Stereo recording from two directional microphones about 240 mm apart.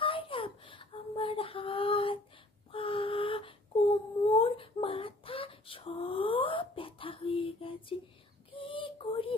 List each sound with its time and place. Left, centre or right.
0.0 s a sound: left
4.3 s whimper: left
8.5 s female singing: left